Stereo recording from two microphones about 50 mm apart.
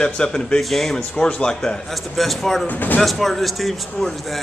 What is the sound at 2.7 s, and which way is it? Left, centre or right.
Speech, left.